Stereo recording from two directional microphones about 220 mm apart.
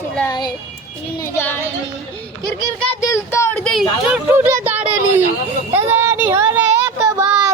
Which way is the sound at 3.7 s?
5° right (ahead or behind).